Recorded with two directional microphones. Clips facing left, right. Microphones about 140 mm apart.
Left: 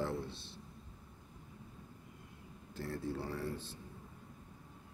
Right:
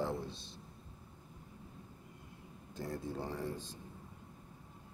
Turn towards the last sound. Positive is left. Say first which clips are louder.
# even
turn(degrees=-15)  # may be behind; listen again after turning